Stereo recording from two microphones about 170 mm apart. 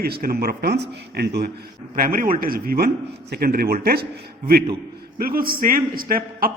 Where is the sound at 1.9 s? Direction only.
55° right (ahead or behind).